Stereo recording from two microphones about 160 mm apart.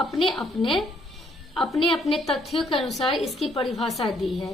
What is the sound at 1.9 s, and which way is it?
A woman's voice, centre (ahead or behind).